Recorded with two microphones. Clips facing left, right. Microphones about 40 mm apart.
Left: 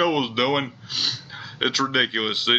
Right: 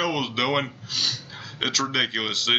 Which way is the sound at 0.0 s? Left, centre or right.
Centre.